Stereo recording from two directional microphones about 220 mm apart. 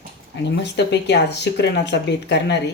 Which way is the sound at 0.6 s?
50° left (ahead or behind).